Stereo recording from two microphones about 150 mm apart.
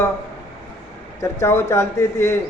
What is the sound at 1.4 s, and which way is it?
Speech, 20° left (ahead or behind).